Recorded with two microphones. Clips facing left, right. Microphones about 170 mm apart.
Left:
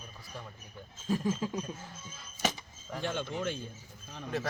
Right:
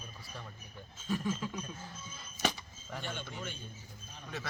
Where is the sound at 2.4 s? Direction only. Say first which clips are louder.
Left 1 dB; centre (ahead or behind).